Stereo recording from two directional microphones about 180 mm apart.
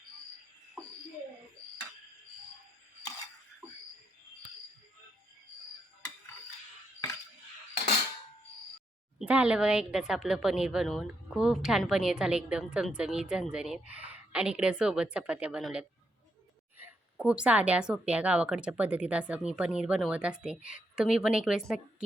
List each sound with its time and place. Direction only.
9.1 s a woman's voice: 5° right (ahead or behind)